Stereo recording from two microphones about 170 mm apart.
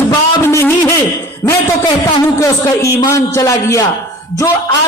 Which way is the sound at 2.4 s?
20° left (ahead or behind).